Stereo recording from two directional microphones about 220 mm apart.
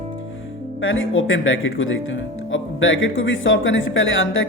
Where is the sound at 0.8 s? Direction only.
60° left (ahead or behind).